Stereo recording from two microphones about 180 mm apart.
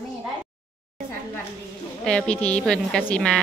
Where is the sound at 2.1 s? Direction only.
5° left (ahead or behind).